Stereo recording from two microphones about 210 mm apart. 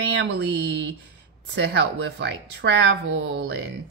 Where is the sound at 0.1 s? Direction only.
55° right (ahead or behind).